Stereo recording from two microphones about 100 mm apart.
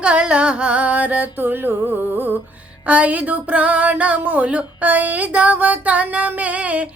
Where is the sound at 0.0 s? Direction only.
10° right (ahead or behind).